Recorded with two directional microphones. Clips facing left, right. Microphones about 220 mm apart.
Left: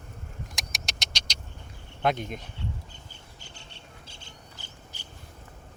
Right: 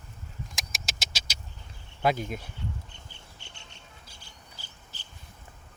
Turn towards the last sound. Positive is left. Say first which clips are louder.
# left 4 dB
turn(degrees=20)  # may be behind; listen again after turning